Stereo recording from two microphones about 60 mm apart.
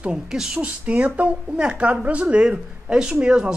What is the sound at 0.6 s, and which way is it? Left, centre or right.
A man's voice, right.